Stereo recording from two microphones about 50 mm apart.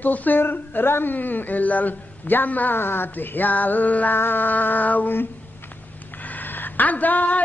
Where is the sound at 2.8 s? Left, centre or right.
Left.